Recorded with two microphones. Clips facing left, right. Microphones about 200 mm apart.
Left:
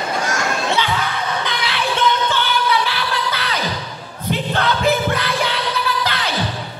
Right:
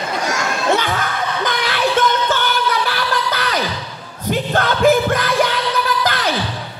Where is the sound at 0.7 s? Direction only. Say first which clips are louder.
Right 2 dB; 45° right (ahead or behind).